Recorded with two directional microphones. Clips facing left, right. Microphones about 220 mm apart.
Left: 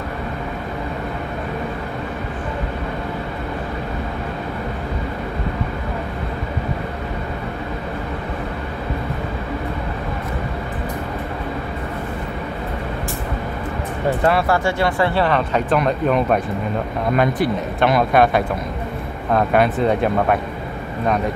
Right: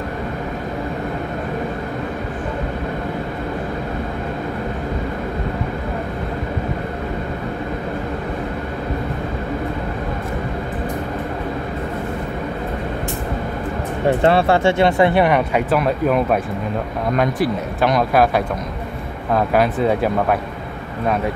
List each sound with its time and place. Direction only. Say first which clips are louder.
14.2 s speech: right 3 dB; 25° right (ahead or behind); by 20.3 s 5° right (ahead or behind)